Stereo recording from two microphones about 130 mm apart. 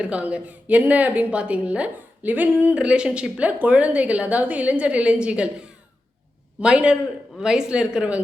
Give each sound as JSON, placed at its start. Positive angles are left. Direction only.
{"t": 0.0, "sound": "a woman's voice", "side_deg": -10}